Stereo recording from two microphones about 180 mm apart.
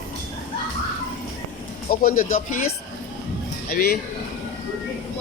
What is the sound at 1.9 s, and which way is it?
Speech, 50° left (ahead or behind).